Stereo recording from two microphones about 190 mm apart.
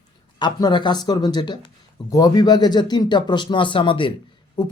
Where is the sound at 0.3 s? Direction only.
25° left (ahead or behind).